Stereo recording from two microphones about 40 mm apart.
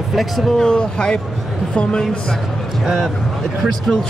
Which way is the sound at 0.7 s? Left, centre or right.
Left.